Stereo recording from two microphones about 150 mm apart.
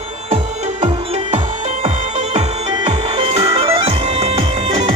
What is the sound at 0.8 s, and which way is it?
Music, 45° right (ahead or behind).